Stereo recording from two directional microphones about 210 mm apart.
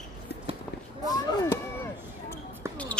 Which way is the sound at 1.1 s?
15° left (ahead or behind).